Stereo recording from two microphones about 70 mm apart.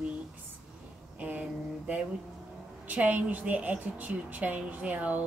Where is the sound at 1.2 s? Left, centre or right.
Centre.